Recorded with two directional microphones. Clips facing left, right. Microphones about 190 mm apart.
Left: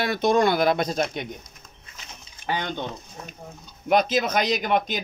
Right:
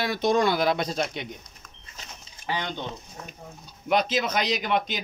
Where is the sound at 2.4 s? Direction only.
50° left (ahead or behind).